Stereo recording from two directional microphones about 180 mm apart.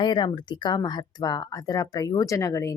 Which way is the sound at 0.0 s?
25° left (ahead or behind).